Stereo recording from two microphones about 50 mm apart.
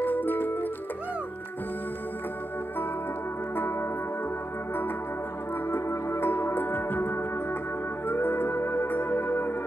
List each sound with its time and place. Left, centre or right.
0.0 s music: left
5.7 s music: left